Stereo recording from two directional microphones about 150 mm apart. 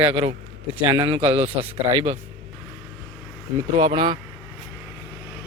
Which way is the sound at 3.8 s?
30° right (ahead or behind).